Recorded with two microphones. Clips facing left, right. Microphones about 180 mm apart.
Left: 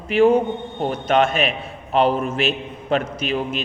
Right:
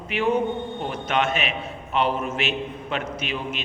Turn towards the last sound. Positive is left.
turn(degrees=40)  # may be behind; listen again after turning